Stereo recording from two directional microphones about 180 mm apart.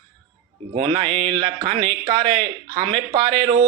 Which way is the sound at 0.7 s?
35° right (ahead or behind).